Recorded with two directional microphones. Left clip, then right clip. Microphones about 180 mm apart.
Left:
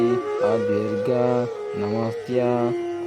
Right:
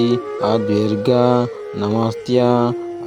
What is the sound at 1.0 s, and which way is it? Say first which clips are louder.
Speech: right 7 dB; 40° right (ahead or behind).